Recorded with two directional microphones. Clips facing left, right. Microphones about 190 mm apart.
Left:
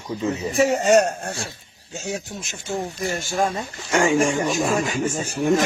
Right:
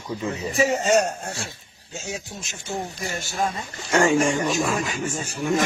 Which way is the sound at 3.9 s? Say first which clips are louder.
Even; 10° left (ahead or behind).